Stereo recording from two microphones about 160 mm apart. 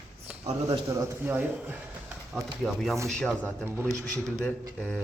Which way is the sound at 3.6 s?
15° right (ahead or behind).